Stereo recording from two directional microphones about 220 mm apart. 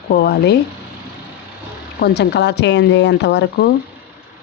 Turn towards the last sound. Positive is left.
turn(degrees=50)  # may be behind; listen again after turning